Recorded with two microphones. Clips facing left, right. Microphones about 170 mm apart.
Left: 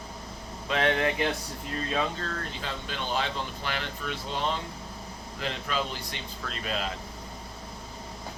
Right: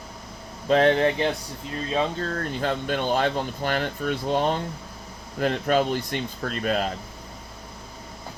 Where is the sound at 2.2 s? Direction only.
45° right (ahead or behind).